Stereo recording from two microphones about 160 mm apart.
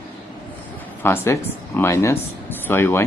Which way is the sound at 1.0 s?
15° left (ahead or behind).